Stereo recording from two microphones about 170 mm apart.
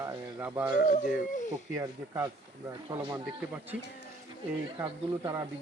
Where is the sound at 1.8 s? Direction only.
20° right (ahead or behind).